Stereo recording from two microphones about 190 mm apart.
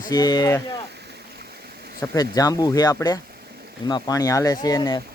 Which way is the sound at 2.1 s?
20° left (ahead or behind).